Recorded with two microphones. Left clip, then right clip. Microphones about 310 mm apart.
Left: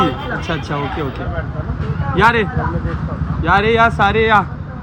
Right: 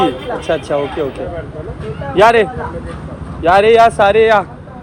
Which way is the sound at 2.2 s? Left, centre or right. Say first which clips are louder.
Right 4 dB; centre.